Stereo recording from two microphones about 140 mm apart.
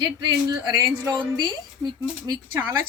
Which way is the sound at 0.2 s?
30° right (ahead or behind).